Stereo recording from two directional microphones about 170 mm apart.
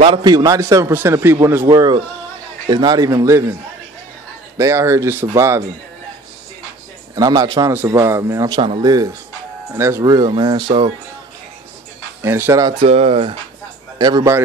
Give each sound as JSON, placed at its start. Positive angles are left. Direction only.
{"t": 0.0, "sound": "a man's voice", "side_deg": -25}
{"t": 4.6, "sound": "a man's voice", "side_deg": -15}
{"t": 7.2, "sound": "a man's voice", "side_deg": -20}
{"t": 10.1, "sound": "a man's voice", "side_deg": -30}
{"t": 12.2, "sound": "a man's voice", "side_deg": -15}
{"t": 12.7, "sound": "speech", "side_deg": -35}
{"t": 13.9, "sound": "speech", "side_deg": -25}